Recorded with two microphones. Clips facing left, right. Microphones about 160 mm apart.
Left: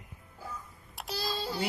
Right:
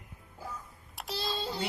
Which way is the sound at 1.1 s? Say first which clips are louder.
Even; 25° right (ahead or behind).